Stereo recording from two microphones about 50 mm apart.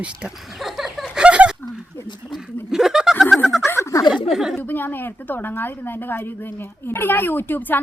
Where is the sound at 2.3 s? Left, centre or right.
Centre.